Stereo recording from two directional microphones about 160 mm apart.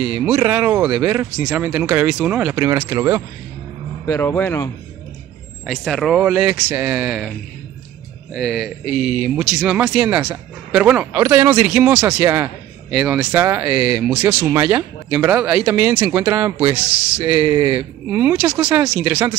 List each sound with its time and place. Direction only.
0.0 s speech: 5° right (ahead or behind)
4.0 s a man's voice: 20° left (ahead or behind)
5.7 s speech: centre (ahead or behind)
17.4 s speech: 30° right (ahead or behind)
18.1 s speech: 10° right (ahead or behind)